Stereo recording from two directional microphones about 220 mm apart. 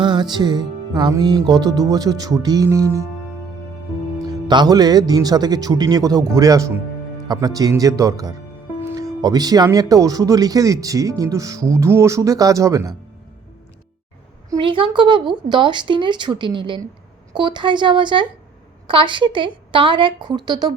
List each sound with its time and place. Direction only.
0.0 s music: 20° right (ahead or behind)
1.5 s speech: 20° right (ahead or behind)
4.3 s speech: 20° right (ahead or behind)
14.5 s speech: 20° right (ahead or behind)